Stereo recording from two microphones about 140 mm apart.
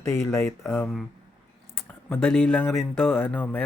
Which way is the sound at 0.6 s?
5° left (ahead or behind).